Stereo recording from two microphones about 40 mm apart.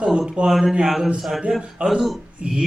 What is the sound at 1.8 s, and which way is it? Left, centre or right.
Speech, right.